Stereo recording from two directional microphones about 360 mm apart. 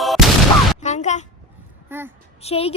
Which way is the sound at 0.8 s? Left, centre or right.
Centre.